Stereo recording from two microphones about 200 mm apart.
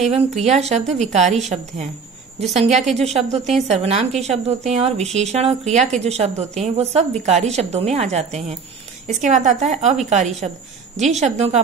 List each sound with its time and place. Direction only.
0.1 s a woman's voice: 35° right (ahead or behind)
2.5 s a woman's voice: 35° right (ahead or behind)